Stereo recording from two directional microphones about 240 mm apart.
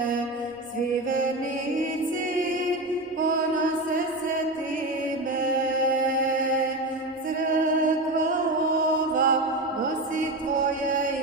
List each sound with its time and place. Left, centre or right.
9.1 s mantra: right